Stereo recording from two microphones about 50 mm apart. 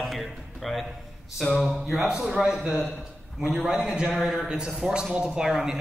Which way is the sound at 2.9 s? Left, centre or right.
Centre.